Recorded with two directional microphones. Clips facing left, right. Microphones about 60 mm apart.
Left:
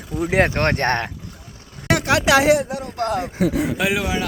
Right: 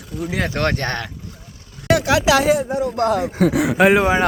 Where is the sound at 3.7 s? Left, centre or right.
Right.